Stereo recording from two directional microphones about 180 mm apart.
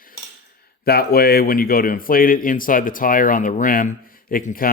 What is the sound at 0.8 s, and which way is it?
Speech, 60° left (ahead or behind).